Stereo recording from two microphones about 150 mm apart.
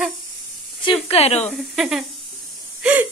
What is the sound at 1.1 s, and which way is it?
Speech, 45° left (ahead or behind).